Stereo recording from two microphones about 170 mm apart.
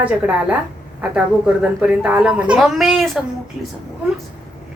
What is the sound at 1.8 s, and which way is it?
Speech, 5° right (ahead or behind).